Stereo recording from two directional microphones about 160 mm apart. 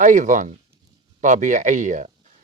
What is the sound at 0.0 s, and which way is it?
Speech, 50° right (ahead or behind).